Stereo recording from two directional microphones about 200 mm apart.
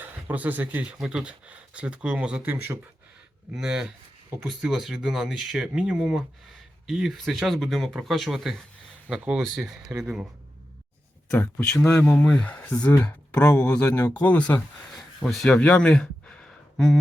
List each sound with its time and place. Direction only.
0.0 s speech: 10° right (ahead or behind)
11.3 s speech: 10° left (ahead or behind)